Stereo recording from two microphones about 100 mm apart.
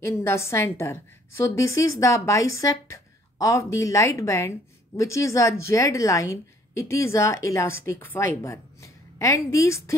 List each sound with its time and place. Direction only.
0.0 s a woman's voice: 25° left (ahead or behind)